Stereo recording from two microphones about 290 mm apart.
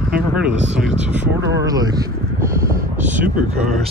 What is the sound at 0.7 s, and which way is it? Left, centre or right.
Speech, centre.